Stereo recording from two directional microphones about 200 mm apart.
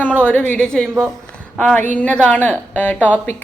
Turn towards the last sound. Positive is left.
turn(degrees=5)  # may be behind; listen again after turning